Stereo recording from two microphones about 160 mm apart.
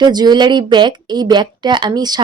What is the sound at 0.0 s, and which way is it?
A woman's voice, 25° right (ahead or behind).